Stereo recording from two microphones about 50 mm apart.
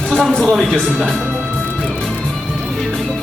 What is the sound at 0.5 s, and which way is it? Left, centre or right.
Speech, centre.